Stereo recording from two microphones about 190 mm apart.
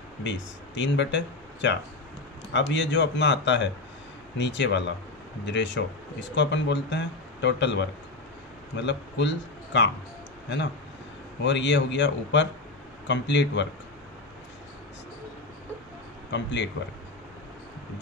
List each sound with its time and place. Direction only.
0.2 s speech: 70° left (ahead or behind)
8.8 s speech: 70° left (ahead or behind)
11.4 s speech: 70° left (ahead or behind)
16.3 s speech: 70° left (ahead or behind)